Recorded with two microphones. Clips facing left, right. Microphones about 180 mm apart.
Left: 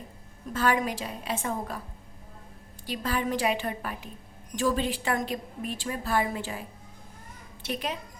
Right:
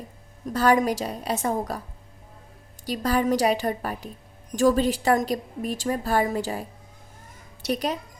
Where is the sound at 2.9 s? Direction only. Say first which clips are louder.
Right 6 dB; 40° right (ahead or behind).